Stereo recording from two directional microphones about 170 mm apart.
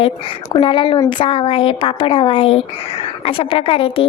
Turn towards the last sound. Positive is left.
turn(degrees=30)  # may be behind; listen again after turning